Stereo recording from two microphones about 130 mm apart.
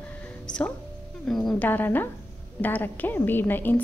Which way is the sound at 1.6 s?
15° left (ahead or behind).